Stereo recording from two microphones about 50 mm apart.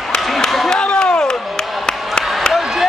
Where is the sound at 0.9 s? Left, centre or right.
Left.